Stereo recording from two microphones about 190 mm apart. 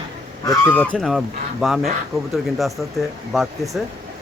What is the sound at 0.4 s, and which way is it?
Speech, 15° left (ahead or behind).